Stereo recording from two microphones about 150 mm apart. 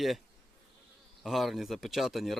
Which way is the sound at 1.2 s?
Centre (ahead or behind).